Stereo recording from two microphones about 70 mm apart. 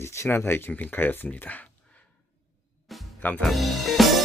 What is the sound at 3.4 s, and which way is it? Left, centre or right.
Music, centre.